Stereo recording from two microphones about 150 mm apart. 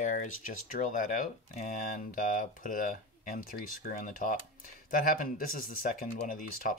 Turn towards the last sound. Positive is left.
turn(degrees=65)  # may be behind; listen again after turning